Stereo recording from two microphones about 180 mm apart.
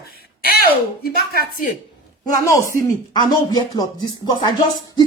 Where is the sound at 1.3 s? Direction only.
55° left (ahead or behind).